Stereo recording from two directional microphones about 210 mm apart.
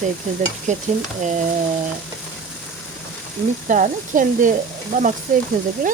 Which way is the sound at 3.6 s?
40° right (ahead or behind).